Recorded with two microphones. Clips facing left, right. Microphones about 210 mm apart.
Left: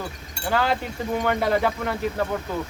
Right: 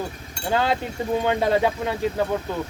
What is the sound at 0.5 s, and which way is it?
Speech, 20° right (ahead or behind).